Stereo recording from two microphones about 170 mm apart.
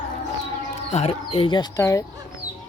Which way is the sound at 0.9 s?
35° left (ahead or behind).